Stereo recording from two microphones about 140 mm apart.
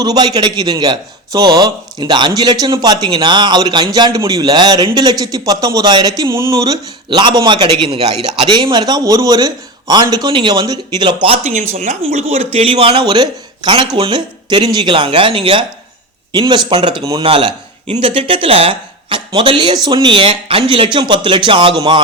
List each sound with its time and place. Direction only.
0.0 s speech: 30° right (ahead or behind)
11.4 s speech: 55° right (ahead or behind); by 17.2 s 30° right (ahead or behind)
17.2 s a man's voice: 40° right (ahead or behind)